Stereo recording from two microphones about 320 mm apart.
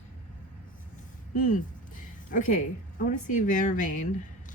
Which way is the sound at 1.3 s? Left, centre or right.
Left.